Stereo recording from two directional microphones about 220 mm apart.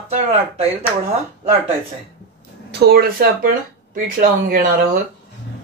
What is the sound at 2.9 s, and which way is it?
Speech, 45° right (ahead or behind).